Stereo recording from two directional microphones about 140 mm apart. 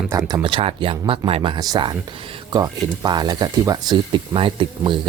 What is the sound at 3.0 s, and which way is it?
Speech, 30° right (ahead or behind).